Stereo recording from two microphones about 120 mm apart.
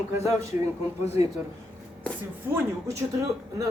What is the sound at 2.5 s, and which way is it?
A man's voice, 25° right (ahead or behind).